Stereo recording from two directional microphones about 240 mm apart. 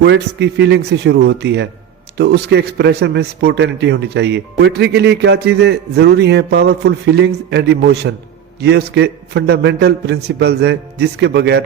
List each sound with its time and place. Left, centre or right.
0.0 s a man's voice: right